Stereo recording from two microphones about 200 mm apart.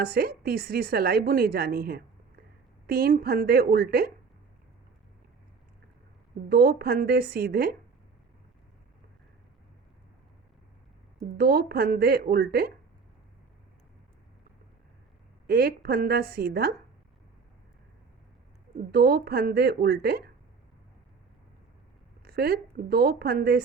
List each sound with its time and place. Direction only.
0.0 s a woman's voice: 50° right (ahead or behind)
6.5 s a woman's voice: 50° right (ahead or behind)
11.3 s a woman's voice: 50° right (ahead or behind)
15.4 s a woman's voice: 50° right (ahead or behind)
18.8 s a woman's voice: 50° right (ahead or behind)
22.2 s a woman's voice: 50° right (ahead or behind)